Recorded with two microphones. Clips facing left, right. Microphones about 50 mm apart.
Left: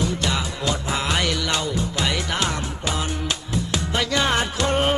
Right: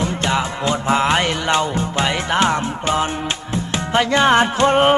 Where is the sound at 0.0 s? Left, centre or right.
Right.